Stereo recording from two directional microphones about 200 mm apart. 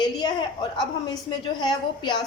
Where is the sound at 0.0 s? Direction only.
20° left (ahead or behind).